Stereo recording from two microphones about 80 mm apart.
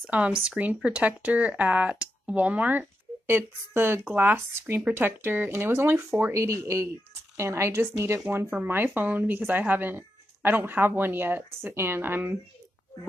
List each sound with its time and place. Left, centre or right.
0.5 s speech: centre